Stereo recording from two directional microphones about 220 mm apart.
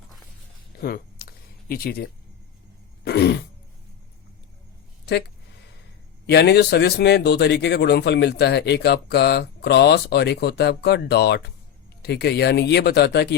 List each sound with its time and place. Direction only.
0.8 s a sound: 45° left (ahead or behind)
3.0 s throat clearing: 50° left (ahead or behind)
6.2 s a man's voice: 50° left (ahead or behind)